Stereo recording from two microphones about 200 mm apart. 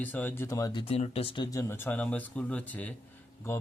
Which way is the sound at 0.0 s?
10° left (ahead or behind).